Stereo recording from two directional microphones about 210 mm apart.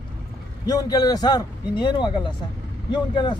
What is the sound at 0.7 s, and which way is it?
A man's voice, 20° left (ahead or behind).